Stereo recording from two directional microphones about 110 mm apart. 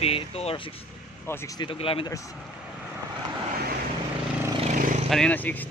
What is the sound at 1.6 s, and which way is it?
Speech, 55° left (ahead or behind).